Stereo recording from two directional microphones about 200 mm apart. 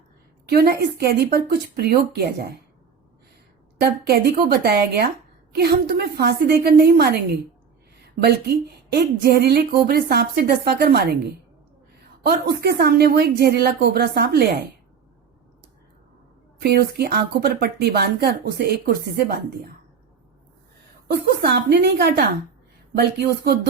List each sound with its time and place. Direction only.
0.4 s speech: 50° right (ahead or behind)
3.8 s speech: 50° right (ahead or behind)
12.2 s speech: 50° right (ahead or behind)
16.6 s speech: 50° right (ahead or behind)
21.1 s a woman's voice: 55° right (ahead or behind)